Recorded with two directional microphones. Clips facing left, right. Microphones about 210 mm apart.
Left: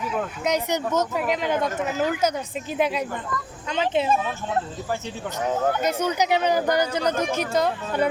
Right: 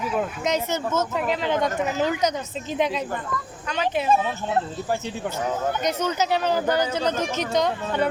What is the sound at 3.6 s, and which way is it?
Speech, 25° left (ahead or behind).